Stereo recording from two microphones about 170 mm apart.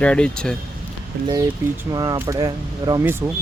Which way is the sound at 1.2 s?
20° right (ahead or behind).